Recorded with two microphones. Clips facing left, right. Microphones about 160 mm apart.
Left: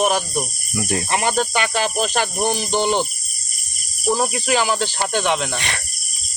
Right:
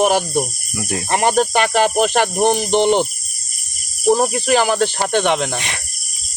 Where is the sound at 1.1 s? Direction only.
40° right (ahead or behind).